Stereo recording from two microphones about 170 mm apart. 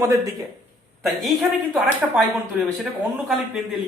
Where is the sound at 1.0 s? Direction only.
Centre (ahead or behind).